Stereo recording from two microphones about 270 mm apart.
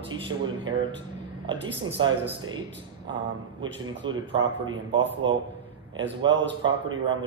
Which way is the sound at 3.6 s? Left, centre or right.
Centre.